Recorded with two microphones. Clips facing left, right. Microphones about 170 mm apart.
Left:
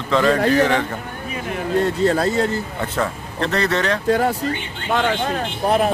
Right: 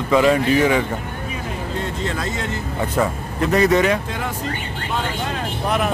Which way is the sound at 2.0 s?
35° left (ahead or behind).